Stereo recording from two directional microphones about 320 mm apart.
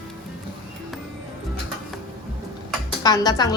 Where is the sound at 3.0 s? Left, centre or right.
Centre.